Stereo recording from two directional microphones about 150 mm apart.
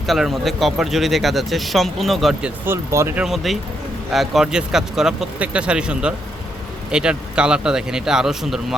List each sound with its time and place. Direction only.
0.0 s speech: centre (ahead or behind)
2.6 s speech: 15° right (ahead or behind)
3.2 s speech: centre (ahead or behind)